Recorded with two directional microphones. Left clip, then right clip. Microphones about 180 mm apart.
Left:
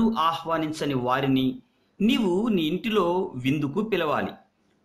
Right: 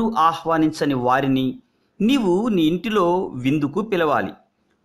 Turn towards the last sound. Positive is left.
turn(degrees=-45)  # may be behind; listen again after turning